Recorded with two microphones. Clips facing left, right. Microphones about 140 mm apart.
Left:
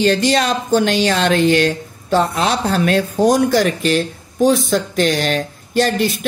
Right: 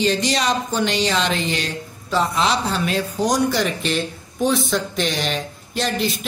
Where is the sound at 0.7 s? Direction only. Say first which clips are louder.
Left 8 dB; 55° left (ahead or behind).